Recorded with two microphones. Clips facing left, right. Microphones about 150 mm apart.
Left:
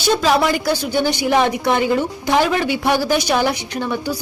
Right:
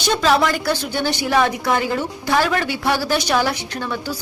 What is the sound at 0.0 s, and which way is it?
A woman's voice, 10° left (ahead or behind).